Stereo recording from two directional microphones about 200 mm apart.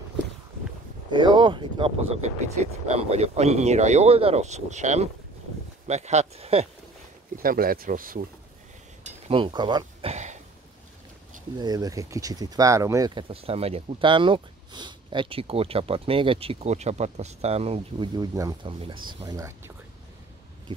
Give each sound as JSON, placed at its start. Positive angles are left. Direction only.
{"t": 1.1, "sound": "speech", "side_deg": -25}
{"t": 7.4, "sound": "speech", "side_deg": -45}
{"t": 9.0, "sound": "speech", "side_deg": -25}
{"t": 10.1, "sound": "throat clearing", "side_deg": -35}
{"t": 11.5, "sound": "speech", "side_deg": -20}